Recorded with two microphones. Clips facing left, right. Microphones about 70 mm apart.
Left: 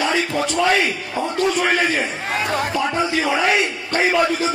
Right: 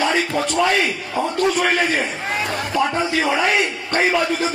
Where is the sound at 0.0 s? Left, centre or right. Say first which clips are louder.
Right 1 dB; right.